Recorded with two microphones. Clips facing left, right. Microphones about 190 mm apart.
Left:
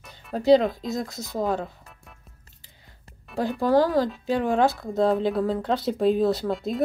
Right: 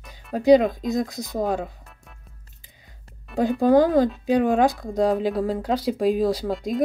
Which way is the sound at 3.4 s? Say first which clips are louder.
Right 4 dB; 20° right (ahead or behind).